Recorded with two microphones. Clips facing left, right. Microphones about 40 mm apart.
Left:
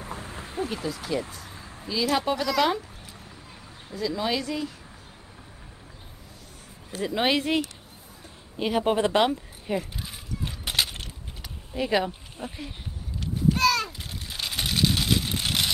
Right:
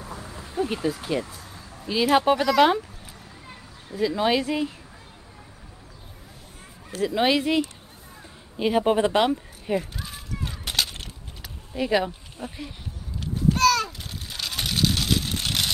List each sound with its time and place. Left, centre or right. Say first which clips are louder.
0.0 s vehicle: left 1 dB; left
0.8 s speech: right 3 dB; right
3.9 s speech: right 5 dB; right
7.0 s speech: right 3 dB; centre
8.5 s speech: right 3 dB; centre
9.9 s a sound: right 1 dB; centre
10.8 s keys jangling: even; centre
12.4 s speech: right 1 dB; centre
13.2 s a sound: right 2 dB; centre
14.6 s vehicle: even; centre